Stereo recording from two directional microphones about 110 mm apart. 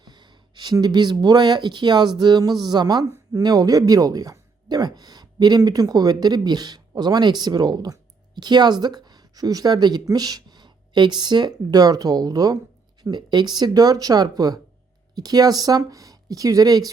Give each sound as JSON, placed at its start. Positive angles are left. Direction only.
{"t": 0.0, "sound": "speech", "side_deg": -40}